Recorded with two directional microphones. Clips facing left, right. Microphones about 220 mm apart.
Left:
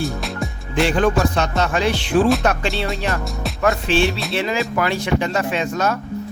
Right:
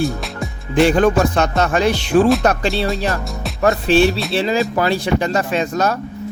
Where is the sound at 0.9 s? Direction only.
40° right (ahead or behind).